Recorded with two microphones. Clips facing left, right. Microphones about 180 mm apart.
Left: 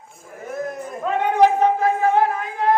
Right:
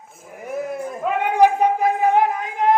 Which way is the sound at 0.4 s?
10° right (ahead or behind).